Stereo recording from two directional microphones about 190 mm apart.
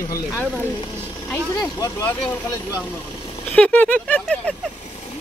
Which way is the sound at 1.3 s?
20° left (ahead or behind).